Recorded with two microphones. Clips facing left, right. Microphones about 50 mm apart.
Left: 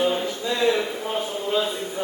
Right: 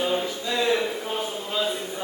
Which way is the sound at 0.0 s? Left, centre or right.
Centre.